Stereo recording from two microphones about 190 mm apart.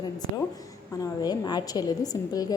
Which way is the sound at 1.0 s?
20° left (ahead or behind).